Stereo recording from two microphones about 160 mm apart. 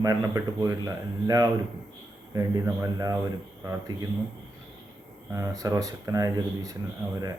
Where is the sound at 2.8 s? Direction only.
20° right (ahead or behind).